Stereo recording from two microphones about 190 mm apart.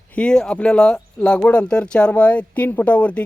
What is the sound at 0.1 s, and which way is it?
Speech, 5° left (ahead or behind).